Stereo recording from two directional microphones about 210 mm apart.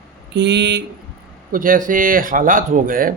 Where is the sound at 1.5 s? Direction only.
40° right (ahead or behind).